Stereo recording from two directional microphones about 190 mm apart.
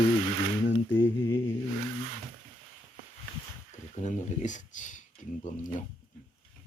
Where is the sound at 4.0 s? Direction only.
40° left (ahead or behind).